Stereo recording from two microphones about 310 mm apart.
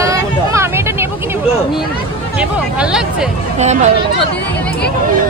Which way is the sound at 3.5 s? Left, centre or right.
Right.